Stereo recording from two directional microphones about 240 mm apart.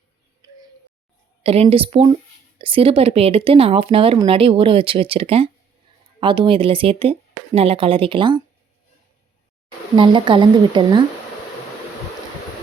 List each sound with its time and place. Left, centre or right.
1.5 s speech: right
9.9 s speech: centre